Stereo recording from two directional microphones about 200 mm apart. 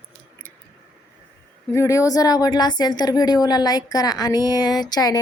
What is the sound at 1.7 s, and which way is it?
Speech, 15° left (ahead or behind).